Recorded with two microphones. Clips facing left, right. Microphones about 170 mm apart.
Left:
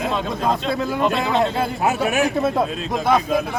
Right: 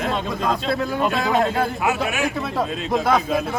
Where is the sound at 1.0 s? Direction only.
5° right (ahead or behind).